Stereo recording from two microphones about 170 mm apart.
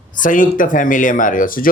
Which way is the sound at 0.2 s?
50° left (ahead or behind).